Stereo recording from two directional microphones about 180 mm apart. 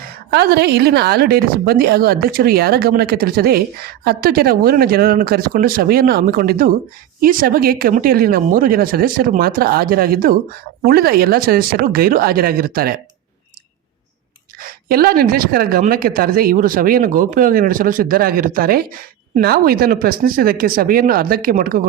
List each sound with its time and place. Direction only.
0.3 s a woman's voice: 65° right (ahead or behind)
14.6 s a woman's voice: 55° right (ahead or behind)